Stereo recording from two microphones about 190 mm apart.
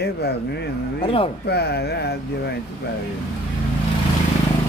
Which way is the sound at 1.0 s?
30° left (ahead or behind).